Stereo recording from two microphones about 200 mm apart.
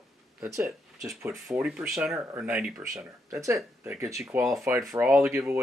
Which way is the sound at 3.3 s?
15° right (ahead or behind).